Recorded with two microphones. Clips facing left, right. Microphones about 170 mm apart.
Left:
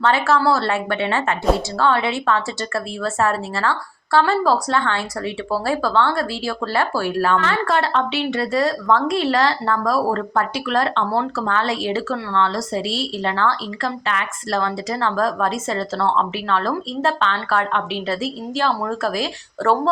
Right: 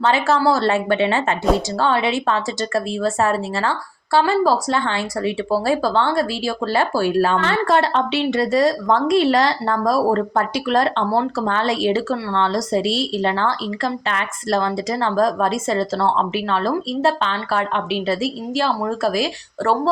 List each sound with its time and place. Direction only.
0.0 s speech: 15° right (ahead or behind)